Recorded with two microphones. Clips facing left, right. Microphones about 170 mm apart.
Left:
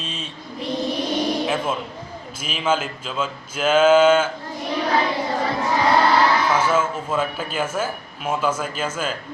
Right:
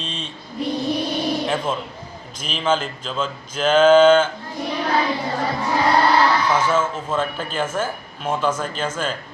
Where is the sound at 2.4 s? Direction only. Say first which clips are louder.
Right 1 dB; 5° left (ahead or behind).